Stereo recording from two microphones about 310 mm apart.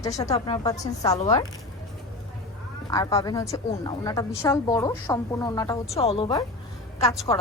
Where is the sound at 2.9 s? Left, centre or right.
Centre.